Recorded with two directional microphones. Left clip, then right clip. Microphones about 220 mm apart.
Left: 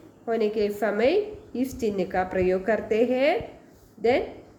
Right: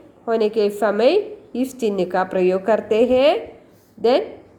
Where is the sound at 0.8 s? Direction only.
20° right (ahead or behind).